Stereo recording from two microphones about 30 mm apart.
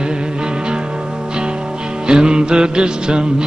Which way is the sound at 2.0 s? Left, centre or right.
Right.